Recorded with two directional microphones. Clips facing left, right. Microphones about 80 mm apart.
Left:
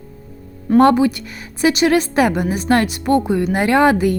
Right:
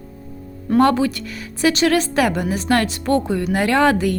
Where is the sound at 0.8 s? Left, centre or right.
Left.